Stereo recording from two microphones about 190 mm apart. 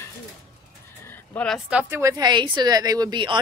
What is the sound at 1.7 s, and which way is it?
A woman's voice, 10° right (ahead or behind).